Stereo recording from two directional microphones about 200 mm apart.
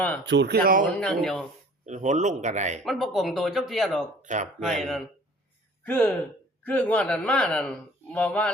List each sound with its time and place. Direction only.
0.3 s speech: 60° right (ahead or behind)
0.9 s speech: 5° left (ahead or behind)
1.8 s a man's voice: 35° right (ahead or behind)
2.8 s speech: centre (ahead or behind)
4.2 s speech: 40° right (ahead or behind)
4.6 s speech: centre (ahead or behind)